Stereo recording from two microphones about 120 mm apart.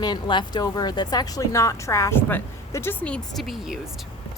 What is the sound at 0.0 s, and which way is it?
A woman's voice, 40° left (ahead or behind).